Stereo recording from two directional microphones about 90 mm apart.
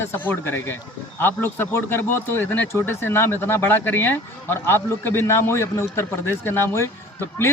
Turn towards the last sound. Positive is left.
turn(degrees=30)  # may be behind; listen again after turning